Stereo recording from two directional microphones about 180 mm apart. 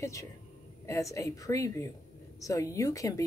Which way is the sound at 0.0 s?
15° left (ahead or behind).